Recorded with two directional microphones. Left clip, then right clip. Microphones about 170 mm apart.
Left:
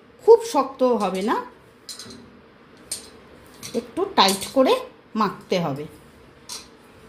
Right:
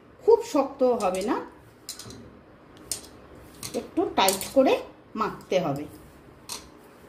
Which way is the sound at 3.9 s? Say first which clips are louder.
Left 4 dB; 55° left (ahead or behind).